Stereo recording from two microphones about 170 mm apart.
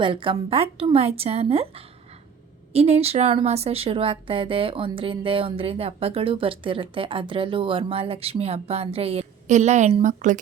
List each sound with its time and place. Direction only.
0.0 s a woman's voice: 30° right (ahead or behind); by 10.4 s 50° right (ahead or behind)